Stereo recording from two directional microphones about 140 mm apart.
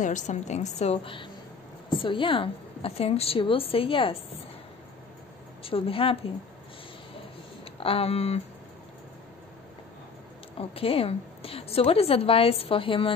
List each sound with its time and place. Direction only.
0.0 s a woman's voice: 60° left (ahead or behind); by 4.2 s 40° left (ahead or behind)
5.6 s a woman's voice: 40° left (ahead or behind)
7.6 s a sound: 45° left (ahead or behind)
10.6 s a woman's voice: 45° left (ahead or behind)